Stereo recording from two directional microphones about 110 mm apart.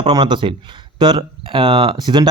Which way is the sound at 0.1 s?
45° right (ahead or behind).